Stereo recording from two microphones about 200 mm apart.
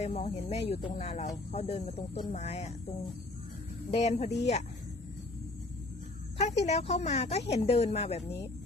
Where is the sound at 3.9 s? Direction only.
30° left (ahead or behind).